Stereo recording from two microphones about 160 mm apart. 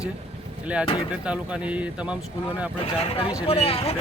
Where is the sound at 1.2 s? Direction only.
5° right (ahead or behind).